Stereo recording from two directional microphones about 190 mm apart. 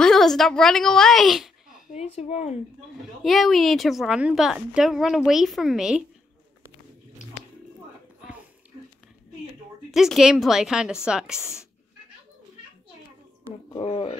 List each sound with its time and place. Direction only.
0.0 s a woman's voice: centre (ahead or behind)
1.9 s speech: 35° left (ahead or behind)
3.3 s a woman's voice: centre (ahead or behind)
9.8 s a woman's voice: centre (ahead or behind)
13.7 s speech: 30° left (ahead or behind)